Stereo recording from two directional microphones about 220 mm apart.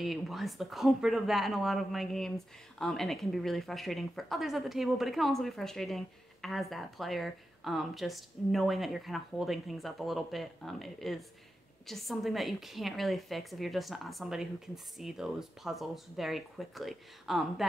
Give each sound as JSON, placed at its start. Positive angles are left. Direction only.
{"t": 0.0, "sound": "speech", "side_deg": 0}